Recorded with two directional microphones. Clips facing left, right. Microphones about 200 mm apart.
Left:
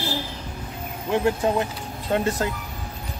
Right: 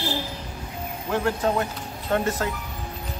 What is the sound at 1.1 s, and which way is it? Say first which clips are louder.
Speech: left 2 dB; 15° left (ahead or behind).